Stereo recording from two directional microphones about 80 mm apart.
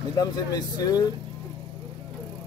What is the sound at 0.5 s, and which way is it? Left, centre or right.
Speech, left.